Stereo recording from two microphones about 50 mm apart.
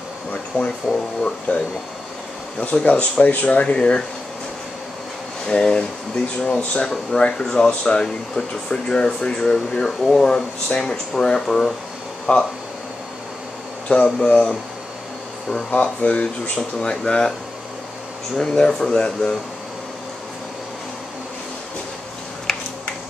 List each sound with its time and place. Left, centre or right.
0.5 s speech: left
5.5 s speech: centre
12.3 s speech: left
13.8 s speech: centre
15.7 s speech: left
18.4 s speech: centre
22.5 s finger snapping: centre